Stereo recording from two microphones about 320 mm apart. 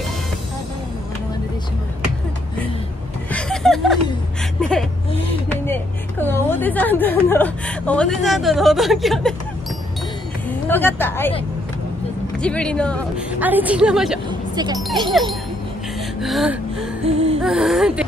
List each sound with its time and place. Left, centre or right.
3.3 s a sound: centre
4.6 s whimper: centre
5.5 s a woman's voice: centre
10.7 s a woman's voice: centre
12.4 s a woman's voice: centre
14.5 s speech: centre
16.2 s a woman's voice: centre
17.0 s gasp: centre
17.4 s speech: centre